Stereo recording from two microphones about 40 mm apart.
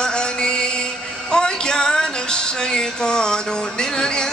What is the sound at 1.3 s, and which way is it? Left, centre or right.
Music, centre.